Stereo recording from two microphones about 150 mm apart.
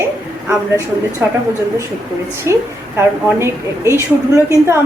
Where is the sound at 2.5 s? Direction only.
20° right (ahead or behind).